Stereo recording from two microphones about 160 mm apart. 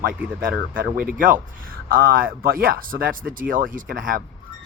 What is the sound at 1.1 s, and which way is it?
Speech, 60° right (ahead or behind).